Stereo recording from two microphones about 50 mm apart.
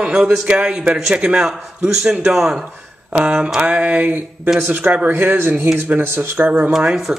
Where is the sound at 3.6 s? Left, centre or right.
Right.